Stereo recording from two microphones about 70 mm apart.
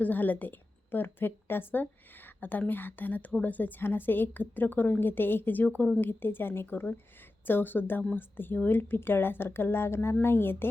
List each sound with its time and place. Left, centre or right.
0.0 s a woman's voice: left